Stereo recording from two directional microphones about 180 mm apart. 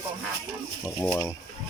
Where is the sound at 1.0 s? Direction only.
15° left (ahead or behind).